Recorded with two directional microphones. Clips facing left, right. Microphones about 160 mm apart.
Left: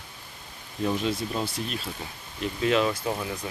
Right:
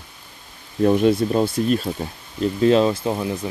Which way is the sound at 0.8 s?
55° right (ahead or behind).